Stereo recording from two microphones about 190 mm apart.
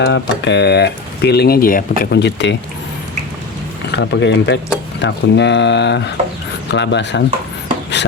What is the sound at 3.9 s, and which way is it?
Speech, 65° left (ahead or behind).